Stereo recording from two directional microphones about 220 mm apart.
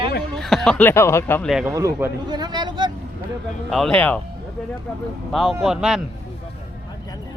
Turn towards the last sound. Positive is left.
turn(degrees=0)  # may be behind; listen again after turning